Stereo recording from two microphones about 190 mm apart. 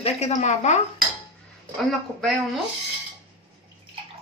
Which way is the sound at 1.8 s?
Centre (ahead or behind).